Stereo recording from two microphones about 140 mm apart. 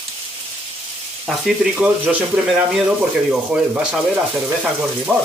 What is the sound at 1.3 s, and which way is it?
Speech, 5° right (ahead or behind).